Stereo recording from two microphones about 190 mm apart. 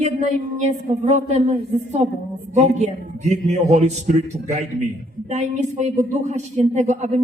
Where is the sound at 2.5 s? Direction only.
35° right (ahead or behind).